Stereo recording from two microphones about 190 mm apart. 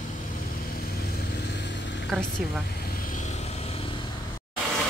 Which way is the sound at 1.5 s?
65° left (ahead or behind).